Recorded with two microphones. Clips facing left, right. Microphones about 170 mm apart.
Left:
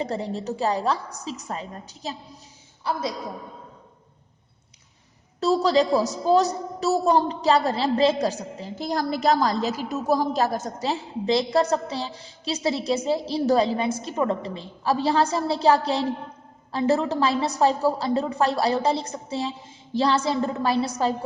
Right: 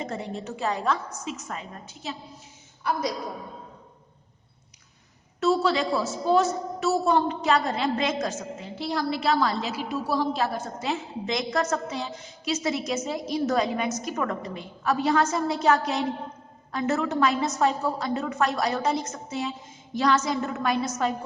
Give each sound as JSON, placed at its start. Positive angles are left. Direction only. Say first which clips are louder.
{"t": 0.0, "sound": "a woman's voice", "louder": "left 4 dB", "side_deg": 35}
{"t": 5.6, "sound": "a woman's voice", "louder": "left 5 dB", "side_deg": 40}